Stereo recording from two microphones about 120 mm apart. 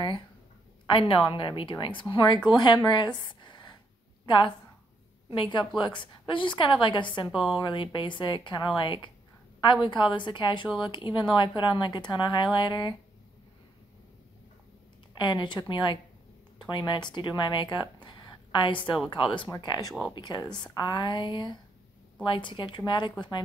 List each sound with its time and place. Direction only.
0.9 s a woman's voice: 45° left (ahead or behind)
5.3 s speech: 45° left (ahead or behind)
7.2 s a woman's voice: 5° right (ahead or behind)
7.5 s a woman's voice: 45° left (ahead or behind)
15.1 s a woman's voice: 40° left (ahead or behind)